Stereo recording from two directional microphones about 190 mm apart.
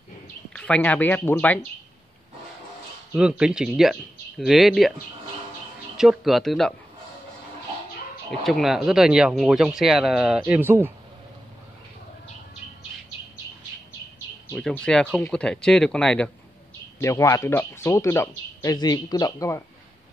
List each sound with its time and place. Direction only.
0.5 s a man's voice: 5° left (ahead or behind)
3.1 s speech: 5° right (ahead or behind)
5.9 s speech: centre (ahead or behind)
8.5 s speech: centre (ahead or behind)
14.5 s speech: 5° left (ahead or behind)
17.0 s a man's voice: 15° left (ahead or behind)